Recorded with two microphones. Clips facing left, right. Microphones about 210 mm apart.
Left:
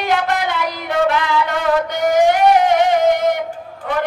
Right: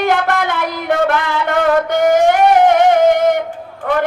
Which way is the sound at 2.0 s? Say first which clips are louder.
Right 1 dB; 50° right (ahead or behind).